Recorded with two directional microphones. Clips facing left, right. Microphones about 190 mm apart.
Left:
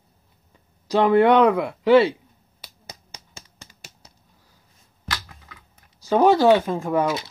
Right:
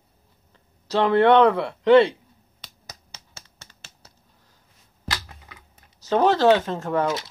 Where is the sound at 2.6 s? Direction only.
15° left (ahead or behind).